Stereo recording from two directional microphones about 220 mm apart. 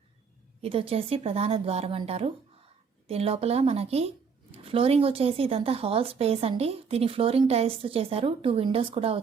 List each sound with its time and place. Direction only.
0.6 s a woman's voice: 25° right (ahead or behind)